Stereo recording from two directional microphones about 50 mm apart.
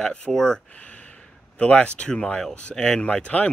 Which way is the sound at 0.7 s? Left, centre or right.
Left.